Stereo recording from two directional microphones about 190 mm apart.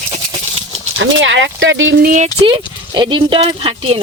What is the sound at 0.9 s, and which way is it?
Speech, 75° right (ahead or behind).